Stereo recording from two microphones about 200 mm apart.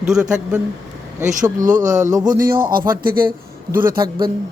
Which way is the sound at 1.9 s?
15° right (ahead or behind).